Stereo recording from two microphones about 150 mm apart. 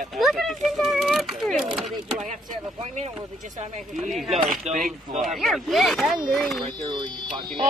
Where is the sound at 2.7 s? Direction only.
45° right (ahead or behind).